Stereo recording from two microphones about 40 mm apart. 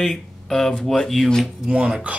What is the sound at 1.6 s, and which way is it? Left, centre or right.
Speech, right.